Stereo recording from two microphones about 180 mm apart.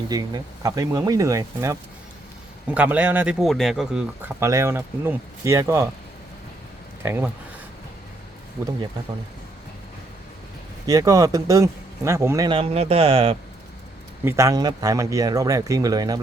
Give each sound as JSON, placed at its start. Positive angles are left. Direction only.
{"t": 0.1, "sound": "speech", "side_deg": -20}
{"t": 7.0, "sound": "speech", "side_deg": -15}
{"t": 10.8, "sound": "speech", "side_deg": -20}
{"t": 12.5, "sound": "speech", "side_deg": -35}
{"t": 14.3, "sound": "speech", "side_deg": -15}